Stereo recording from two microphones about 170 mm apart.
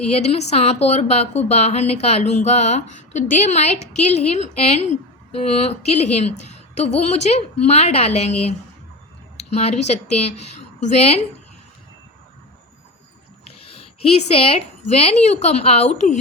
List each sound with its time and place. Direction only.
0.1 s speech: 40° left (ahead or behind)
13.7 s a woman's voice: 35° left (ahead or behind)